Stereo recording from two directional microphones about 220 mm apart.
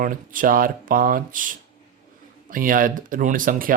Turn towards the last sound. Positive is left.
turn(degrees=-40)  # may be behind; listen again after turning